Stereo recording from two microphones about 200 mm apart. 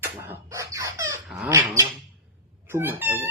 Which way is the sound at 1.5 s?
15° right (ahead or behind).